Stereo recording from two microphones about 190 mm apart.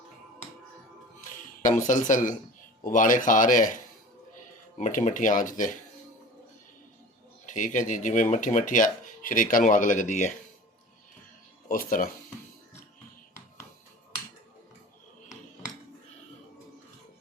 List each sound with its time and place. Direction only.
1.6 s speech: 40° left (ahead or behind)
4.8 s speech: 40° left (ahead or behind)
7.4 s speech: 40° left (ahead or behind)
11.7 s speech: 45° left (ahead or behind)